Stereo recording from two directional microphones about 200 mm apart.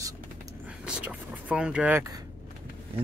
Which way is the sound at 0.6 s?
5° right (ahead or behind).